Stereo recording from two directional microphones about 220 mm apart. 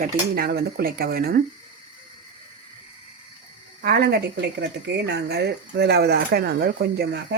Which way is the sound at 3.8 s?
45° right (ahead or behind).